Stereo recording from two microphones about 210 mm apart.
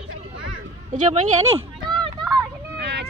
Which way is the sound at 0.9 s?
35° right (ahead or behind).